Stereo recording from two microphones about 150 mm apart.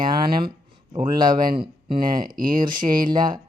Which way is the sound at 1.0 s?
30° right (ahead or behind).